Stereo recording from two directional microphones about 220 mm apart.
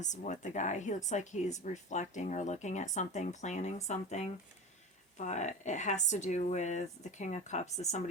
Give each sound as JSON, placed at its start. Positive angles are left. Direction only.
{"t": 0.0, "sound": "speech", "side_deg": 35}